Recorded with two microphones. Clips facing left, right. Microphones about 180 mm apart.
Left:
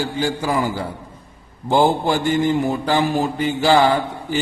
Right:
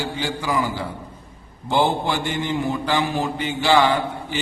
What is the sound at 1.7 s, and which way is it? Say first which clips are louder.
Mantra: left 4 dB; 45° left (ahead or behind).